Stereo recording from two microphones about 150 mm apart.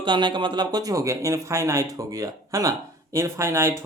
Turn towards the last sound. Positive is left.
turn(degrees=-20)  # may be behind; listen again after turning